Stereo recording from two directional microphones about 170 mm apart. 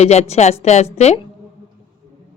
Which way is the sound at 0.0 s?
40° left (ahead or behind).